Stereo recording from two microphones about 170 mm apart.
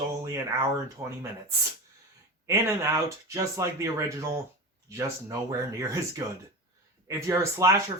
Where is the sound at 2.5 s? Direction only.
15° right (ahead or behind).